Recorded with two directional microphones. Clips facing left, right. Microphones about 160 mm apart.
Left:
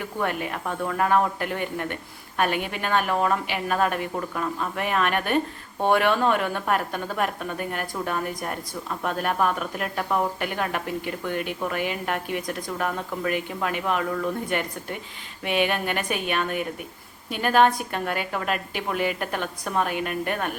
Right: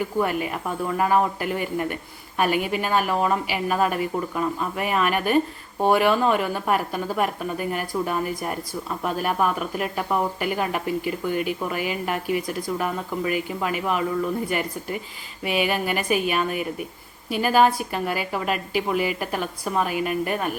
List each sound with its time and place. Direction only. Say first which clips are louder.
0.2 s speech: right 2 dB; 5° right (ahead or behind)